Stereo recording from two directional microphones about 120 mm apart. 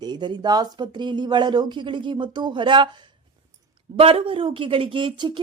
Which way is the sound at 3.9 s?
55° right (ahead or behind).